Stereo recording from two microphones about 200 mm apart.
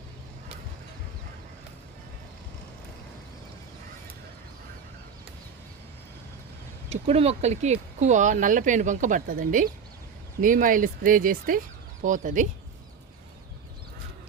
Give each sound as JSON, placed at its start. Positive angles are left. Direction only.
{"t": 6.9, "sound": "speech", "side_deg": -30}